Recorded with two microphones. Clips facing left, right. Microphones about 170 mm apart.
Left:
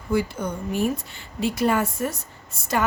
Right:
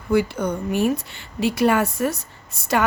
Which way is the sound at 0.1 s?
70° right (ahead or behind).